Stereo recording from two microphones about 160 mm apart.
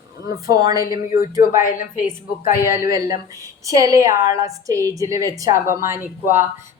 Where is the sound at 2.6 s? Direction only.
15° right (ahead or behind).